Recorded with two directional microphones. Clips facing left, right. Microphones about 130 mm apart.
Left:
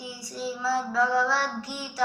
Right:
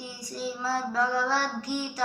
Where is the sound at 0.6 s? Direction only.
45° right (ahead or behind).